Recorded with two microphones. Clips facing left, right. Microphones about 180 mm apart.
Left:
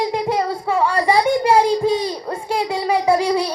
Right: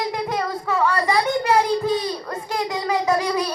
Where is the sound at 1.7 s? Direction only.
15° left (ahead or behind).